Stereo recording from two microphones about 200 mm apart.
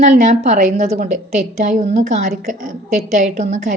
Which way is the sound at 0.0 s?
35° right (ahead or behind).